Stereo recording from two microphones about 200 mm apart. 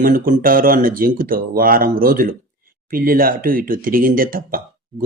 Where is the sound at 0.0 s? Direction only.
45° right (ahead or behind).